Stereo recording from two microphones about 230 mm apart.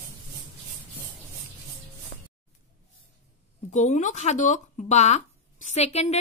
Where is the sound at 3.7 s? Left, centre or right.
Left.